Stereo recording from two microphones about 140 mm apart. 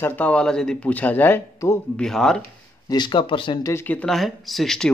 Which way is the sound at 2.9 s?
35° left (ahead or behind).